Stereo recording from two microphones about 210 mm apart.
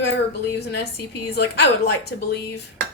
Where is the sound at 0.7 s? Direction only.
50° left (ahead or behind).